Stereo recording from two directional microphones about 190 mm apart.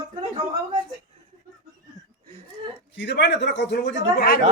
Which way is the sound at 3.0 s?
65° left (ahead or behind).